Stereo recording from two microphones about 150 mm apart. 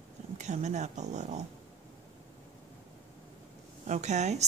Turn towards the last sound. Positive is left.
turn(degrees=-50)  # may be behind; listen again after turning